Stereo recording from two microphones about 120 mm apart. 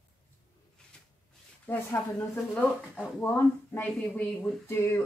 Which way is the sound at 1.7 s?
15° left (ahead or behind).